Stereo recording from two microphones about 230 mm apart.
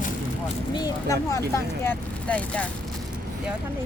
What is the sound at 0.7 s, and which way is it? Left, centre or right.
Speech, centre.